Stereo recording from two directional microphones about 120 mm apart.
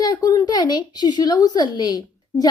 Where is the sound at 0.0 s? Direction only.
35° left (ahead or behind).